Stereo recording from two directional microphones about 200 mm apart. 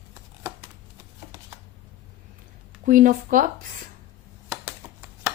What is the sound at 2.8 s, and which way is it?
Speech, 40° right (ahead or behind).